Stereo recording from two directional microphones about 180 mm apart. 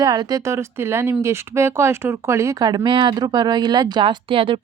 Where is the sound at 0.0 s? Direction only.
20° right (ahead or behind).